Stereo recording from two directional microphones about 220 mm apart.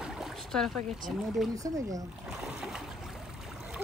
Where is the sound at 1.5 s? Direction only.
15° right (ahead or behind).